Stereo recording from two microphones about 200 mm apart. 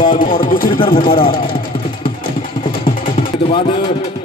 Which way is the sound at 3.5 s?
25° left (ahead or behind).